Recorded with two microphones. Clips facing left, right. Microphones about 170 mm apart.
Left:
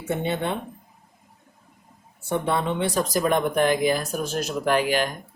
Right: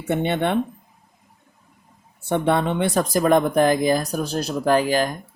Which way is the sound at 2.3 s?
65° right (ahead or behind).